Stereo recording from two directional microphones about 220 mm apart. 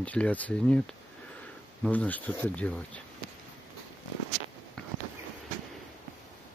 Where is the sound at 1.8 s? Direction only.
5° left (ahead or behind).